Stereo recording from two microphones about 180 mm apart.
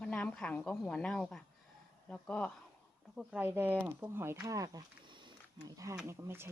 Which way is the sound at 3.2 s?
10° right (ahead or behind).